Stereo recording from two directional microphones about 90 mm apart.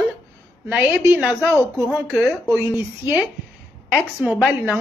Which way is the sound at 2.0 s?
Centre (ahead or behind).